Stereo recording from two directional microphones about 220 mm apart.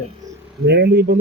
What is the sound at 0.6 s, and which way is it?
Speech, 45° right (ahead or behind).